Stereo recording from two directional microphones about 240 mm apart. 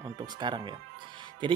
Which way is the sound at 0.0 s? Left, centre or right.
Centre.